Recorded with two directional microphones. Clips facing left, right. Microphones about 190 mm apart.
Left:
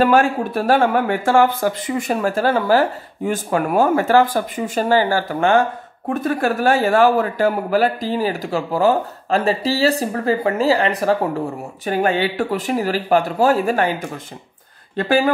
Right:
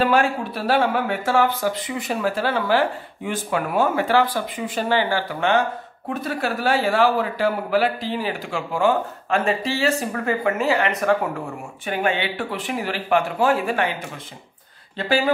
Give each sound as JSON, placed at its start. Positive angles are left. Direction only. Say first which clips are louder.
{"t": 0.0, "sound": "a man's voice", "louder": "left 4 dB", "side_deg": 45}
{"t": 15.0, "sound": "speech", "louder": "left 4 dB", "side_deg": 50}